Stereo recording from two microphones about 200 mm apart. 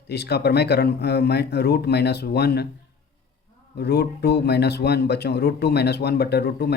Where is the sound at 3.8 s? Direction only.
55° left (ahead or behind).